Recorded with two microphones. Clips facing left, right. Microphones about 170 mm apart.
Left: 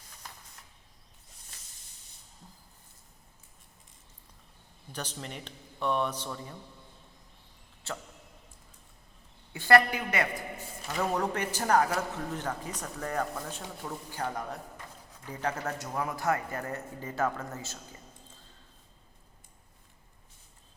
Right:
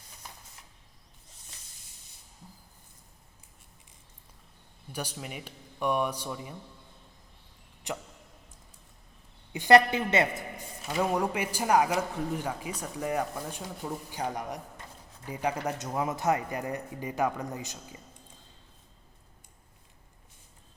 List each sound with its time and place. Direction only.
4.9 s a man's voice: 10° right (ahead or behind)
7.9 s a man's voice: 15° right (ahead or behind)
9.5 s a woman's voice: 20° right (ahead or behind)
10.8 s a man's voice: 10° right (ahead or behind)